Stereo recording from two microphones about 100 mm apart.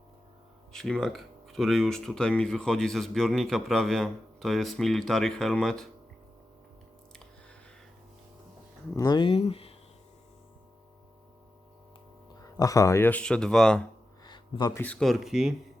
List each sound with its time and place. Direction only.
0.7 s speech: 5° left (ahead or behind)
9.0 s speech: 45° left (ahead or behind)
9.2 s speech: 75° left (ahead or behind)
12.5 s speech: 35° left (ahead or behind)
13.1 s speech: 10° left (ahead or behind)
14.3 s music: 50° left (ahead or behind)
14.9 s speech: centre (ahead or behind)